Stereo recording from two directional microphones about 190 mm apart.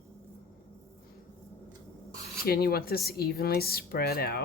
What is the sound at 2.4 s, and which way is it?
Speech, 50° left (ahead or behind).